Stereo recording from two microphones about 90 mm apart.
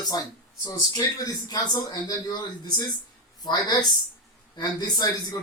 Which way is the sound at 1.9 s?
55° left (ahead or behind).